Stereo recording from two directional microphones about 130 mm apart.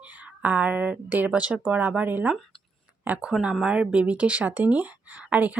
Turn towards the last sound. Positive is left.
turn(degrees=-10)  # may be behind; listen again after turning